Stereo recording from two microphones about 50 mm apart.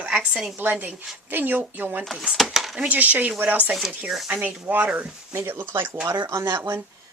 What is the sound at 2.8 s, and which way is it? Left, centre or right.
Speech, right.